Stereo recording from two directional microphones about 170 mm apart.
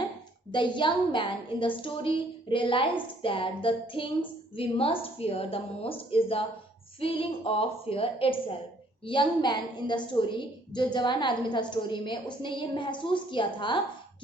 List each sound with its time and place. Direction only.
0.5 s a woman's voice: 30° left (ahead or behind)